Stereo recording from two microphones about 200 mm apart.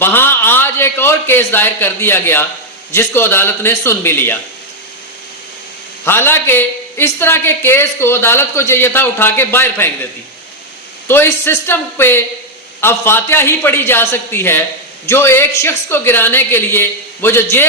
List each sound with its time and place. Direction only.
0.0 s a man's voice: 10° left (ahead or behind)
6.1 s a man's voice: 10° left (ahead or behind)
11.1 s a man's voice: 10° left (ahead or behind)